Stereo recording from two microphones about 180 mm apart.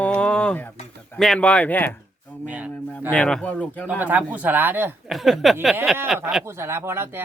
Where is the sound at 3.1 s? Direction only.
5° left (ahead or behind).